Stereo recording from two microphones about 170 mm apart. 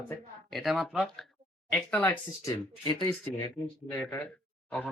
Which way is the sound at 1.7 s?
10° left (ahead or behind).